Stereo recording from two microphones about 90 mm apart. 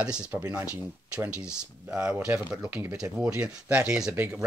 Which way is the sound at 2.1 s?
15° right (ahead or behind).